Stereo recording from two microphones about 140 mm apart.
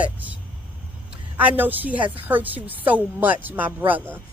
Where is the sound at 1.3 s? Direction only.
10° right (ahead or behind).